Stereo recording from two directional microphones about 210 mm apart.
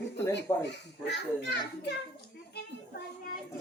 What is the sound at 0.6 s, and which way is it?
A child's voice, 55° left (ahead or behind).